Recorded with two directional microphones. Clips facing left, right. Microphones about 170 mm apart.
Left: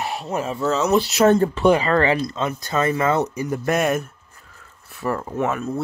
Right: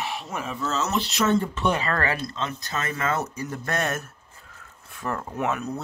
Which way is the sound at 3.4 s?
15° left (ahead or behind).